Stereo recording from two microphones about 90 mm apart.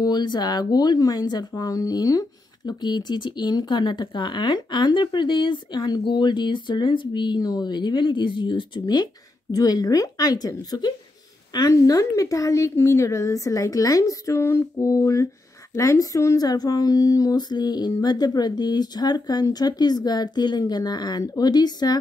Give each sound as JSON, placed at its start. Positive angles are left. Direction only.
{"t": 0.0, "sound": "a woman's voice", "side_deg": 55}